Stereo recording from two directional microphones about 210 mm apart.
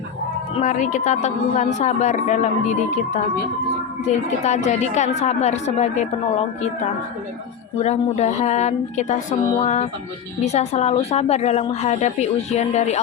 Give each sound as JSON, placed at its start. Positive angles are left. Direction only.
{"t": 0.5, "sound": "a woman's voice", "side_deg": 35}
{"t": 4.0, "sound": "a woman's voice", "side_deg": 35}
{"t": 7.8, "sound": "a woman's voice", "side_deg": 30}